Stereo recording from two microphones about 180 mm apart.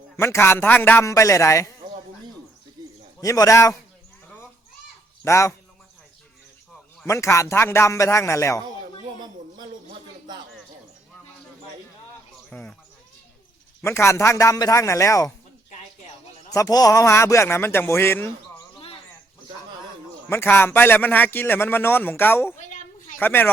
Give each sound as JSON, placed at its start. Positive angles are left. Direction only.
{"t": 0.2, "sound": "a man's voice", "side_deg": 15}
{"t": 3.2, "sound": "a man's voice", "side_deg": 20}
{"t": 5.2, "sound": "a man's voice", "side_deg": 15}
{"t": 7.0, "sound": "a man's voice", "side_deg": 15}
{"t": 9.1, "sound": "a sound", "side_deg": -25}
{"t": 12.5, "sound": "speech", "side_deg": 5}
{"t": 13.8, "sound": "a man's voice", "side_deg": 15}
{"t": 16.5, "sound": "a man's voice", "side_deg": 20}
{"t": 20.3, "sound": "a man's voice", "side_deg": 10}
{"t": 22.6, "sound": "a sound", "side_deg": 45}
{"t": 23.2, "sound": "a man's voice", "side_deg": 10}